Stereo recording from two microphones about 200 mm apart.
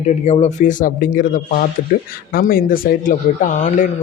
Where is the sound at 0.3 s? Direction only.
35° left (ahead or behind).